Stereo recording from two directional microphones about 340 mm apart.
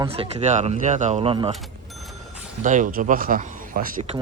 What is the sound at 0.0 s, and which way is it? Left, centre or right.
Speech, centre.